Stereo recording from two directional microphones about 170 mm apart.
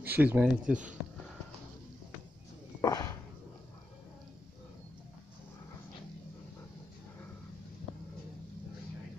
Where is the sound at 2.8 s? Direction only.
20° left (ahead or behind).